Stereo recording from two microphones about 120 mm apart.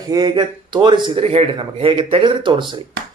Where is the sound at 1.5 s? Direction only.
45° right (ahead or behind).